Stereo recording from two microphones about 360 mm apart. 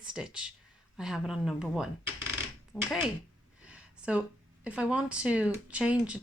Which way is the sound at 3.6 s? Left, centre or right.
Centre.